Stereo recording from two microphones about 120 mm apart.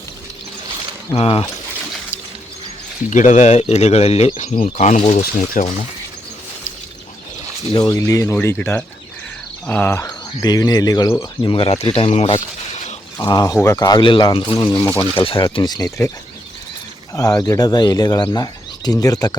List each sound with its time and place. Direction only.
1.1 s speech: 50° left (ahead or behind)
3.1 s speech: 90° left; by 4.4 s 60° left (ahead or behind)
4.6 s speech: 75° left (ahead or behind)
7.9 s speech: 25° left (ahead or behind)
10.4 s speech: 35° left (ahead or behind)
11.2 s speech: 45° left (ahead or behind)
13.1 s speech: 30° left (ahead or behind)
14.0 s speech: 40° left (ahead or behind)
14.8 s speech: 15° left (ahead or behind)
15.2 s speech: 45° left (ahead or behind)
15.4 s speech: 35° left (ahead or behind)
17.2 s speech: 30° left (ahead or behind)